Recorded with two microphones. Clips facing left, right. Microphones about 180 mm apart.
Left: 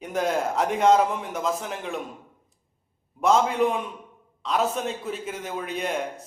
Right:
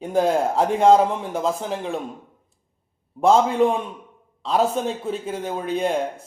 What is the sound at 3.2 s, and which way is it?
A man's voice, 30° right (ahead or behind).